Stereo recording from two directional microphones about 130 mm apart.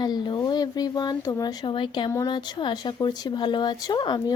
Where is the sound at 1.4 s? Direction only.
30° left (ahead or behind).